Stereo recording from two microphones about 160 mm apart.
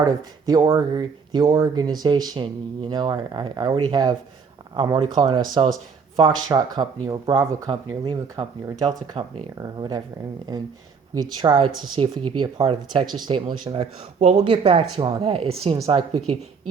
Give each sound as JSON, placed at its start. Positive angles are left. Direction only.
{"t": 0.0, "sound": "speech", "side_deg": -25}
{"t": 7.7, "sound": "speech", "side_deg": -30}
{"t": 8.9, "sound": "speech", "side_deg": -40}
{"t": 9.6, "sound": "speech", "side_deg": -25}
{"t": 11.2, "sound": "speech", "side_deg": -30}